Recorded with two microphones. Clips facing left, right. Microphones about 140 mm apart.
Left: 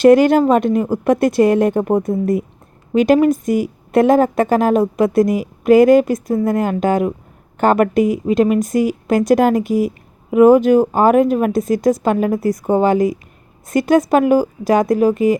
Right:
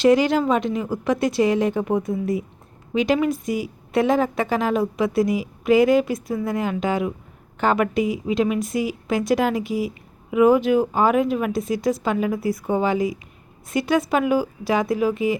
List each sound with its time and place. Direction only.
0.0 s a woman's voice: 50° left (ahead or behind)